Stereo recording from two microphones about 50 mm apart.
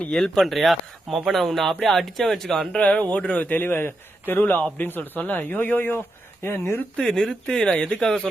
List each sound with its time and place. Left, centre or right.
0.1 s speech: centre
2.7 s a man's voice: left
6.4 s speech: left
6.9 s speech: centre